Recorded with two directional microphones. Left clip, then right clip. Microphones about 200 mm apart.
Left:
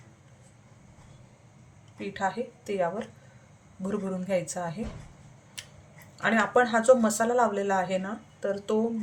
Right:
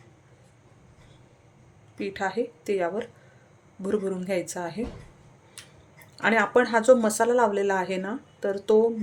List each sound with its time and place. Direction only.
2.0 s a woman's voice: 45° right (ahead or behind)
6.1 s speech: 35° right (ahead or behind)